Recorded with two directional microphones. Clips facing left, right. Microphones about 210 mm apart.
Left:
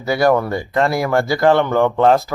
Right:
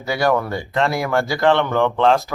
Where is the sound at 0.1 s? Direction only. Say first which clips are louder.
Left 4 dB; centre (ahead or behind).